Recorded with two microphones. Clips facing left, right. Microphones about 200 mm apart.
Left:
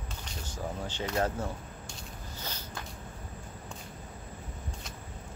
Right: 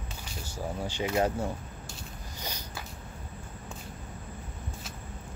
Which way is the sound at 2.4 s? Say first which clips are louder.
Right 2 dB; 15° right (ahead or behind).